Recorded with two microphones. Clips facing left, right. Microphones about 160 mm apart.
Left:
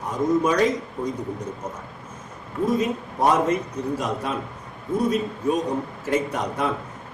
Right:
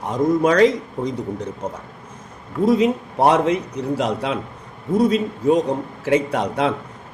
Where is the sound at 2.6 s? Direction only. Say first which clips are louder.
Right 7 dB; 70° right (ahead or behind).